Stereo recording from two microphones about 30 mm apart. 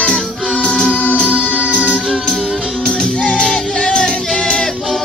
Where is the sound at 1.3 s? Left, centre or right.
Right.